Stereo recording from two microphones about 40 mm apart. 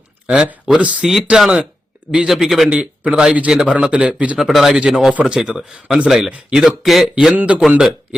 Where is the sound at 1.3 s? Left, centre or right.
Centre.